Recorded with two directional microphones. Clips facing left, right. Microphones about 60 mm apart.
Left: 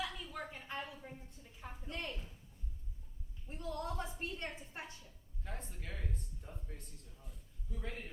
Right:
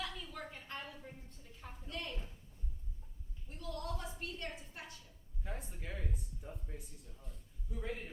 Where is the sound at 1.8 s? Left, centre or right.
Left.